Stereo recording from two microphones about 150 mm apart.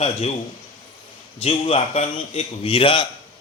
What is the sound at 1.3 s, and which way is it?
A man's voice, 40° left (ahead or behind).